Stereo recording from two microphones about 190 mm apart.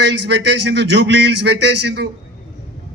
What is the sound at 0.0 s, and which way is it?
A man's voice, 65° right (ahead or behind).